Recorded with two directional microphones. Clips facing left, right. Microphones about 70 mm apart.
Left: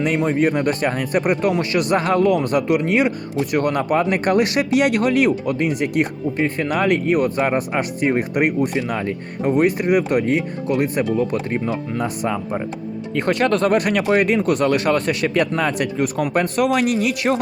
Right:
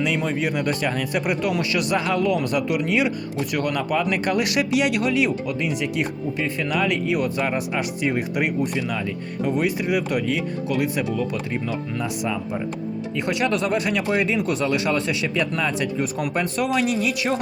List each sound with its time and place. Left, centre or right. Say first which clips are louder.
0.0 s speech: left 5 dB; left
13.9 s speech: left 5 dB; left
14.4 s speech: left 5 dB; left